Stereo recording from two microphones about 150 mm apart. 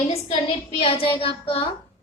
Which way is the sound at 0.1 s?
40° left (ahead or behind).